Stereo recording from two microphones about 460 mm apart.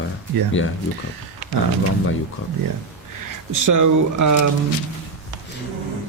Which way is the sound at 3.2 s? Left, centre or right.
Right.